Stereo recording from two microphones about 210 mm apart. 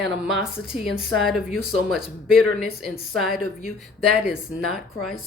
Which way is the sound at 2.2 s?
Centre (ahead or behind).